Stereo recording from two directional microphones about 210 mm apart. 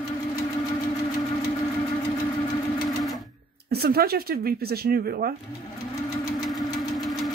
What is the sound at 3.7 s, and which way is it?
Speech, 50° right (ahead or behind).